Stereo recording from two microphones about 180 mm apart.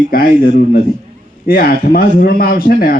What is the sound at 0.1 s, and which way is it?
A man's voice, 55° left (ahead or behind).